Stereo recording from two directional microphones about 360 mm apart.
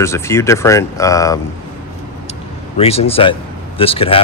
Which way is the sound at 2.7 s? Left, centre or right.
Centre.